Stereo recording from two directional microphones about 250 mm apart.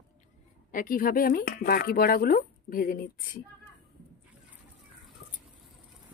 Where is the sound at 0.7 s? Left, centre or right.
Left.